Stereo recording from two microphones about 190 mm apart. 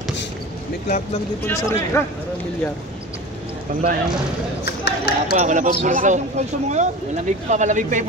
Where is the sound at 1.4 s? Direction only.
10° left (ahead or behind).